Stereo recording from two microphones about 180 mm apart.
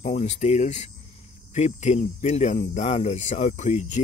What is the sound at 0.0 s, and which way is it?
Speech, 40° left (ahead or behind).